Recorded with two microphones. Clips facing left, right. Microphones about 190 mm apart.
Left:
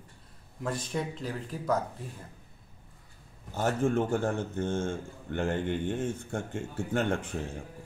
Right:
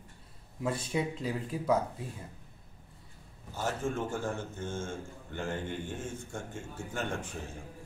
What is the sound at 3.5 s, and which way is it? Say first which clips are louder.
A man's voice: left 6 dB; 60° left (ahead or behind).